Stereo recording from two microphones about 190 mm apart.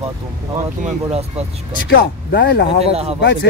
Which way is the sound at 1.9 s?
60° left (ahead or behind).